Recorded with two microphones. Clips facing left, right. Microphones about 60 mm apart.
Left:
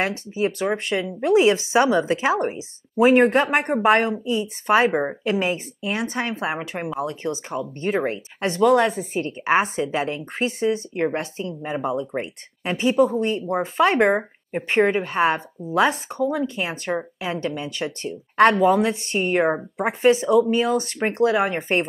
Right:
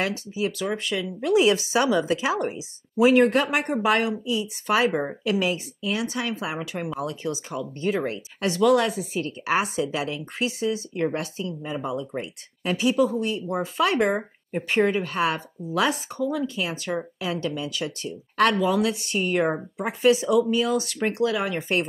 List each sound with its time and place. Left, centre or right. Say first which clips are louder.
0.0 s speech: left 3 dB; left